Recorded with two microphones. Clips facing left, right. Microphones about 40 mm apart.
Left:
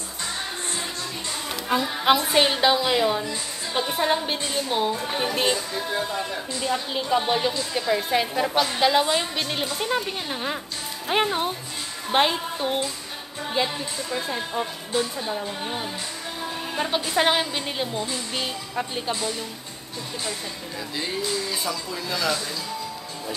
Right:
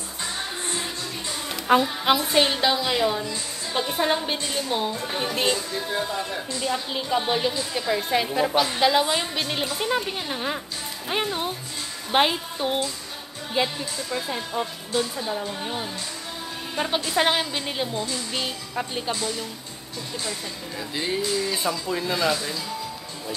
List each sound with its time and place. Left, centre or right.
0.2 s music: centre
2.0 s a woman's voice: centre
11.1 s a woman's voice: centre
12.1 s a woman's voice: centre
20.9 s a woman's voice: centre
21.5 s speech: right